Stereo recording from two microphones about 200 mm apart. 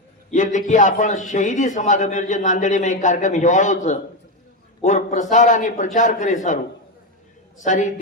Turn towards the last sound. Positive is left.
turn(degrees=40)  # may be behind; listen again after turning